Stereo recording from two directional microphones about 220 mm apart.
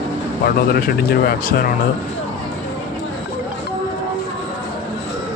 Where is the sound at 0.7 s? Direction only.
45° left (ahead or behind).